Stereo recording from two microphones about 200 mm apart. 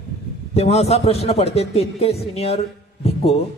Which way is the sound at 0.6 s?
30° left (ahead or behind).